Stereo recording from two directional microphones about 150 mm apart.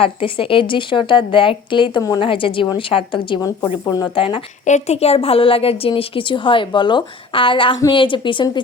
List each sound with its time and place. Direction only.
0.0 s a woman's voice: 35° left (ahead or behind)
3.8 s speech: 25° left (ahead or behind)
4.1 s a woman's voice: 35° left (ahead or behind)
4.6 s a woman's voice: 50° left (ahead or behind); by 8.6 s 35° left (ahead or behind)